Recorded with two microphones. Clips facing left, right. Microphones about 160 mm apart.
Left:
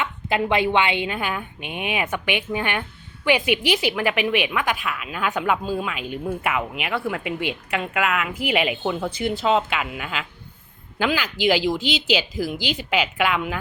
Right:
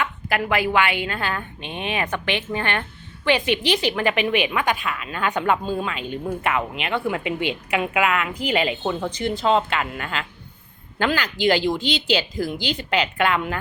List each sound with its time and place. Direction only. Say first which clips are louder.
0.0 s a woman's voice: left 1 dB; 20° left (ahead or behind); by 13.6 s 5° left (ahead or behind)